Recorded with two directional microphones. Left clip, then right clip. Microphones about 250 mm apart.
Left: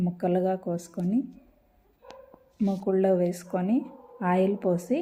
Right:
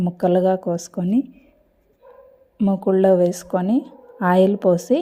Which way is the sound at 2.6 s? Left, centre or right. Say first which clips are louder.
Right 8 dB; right.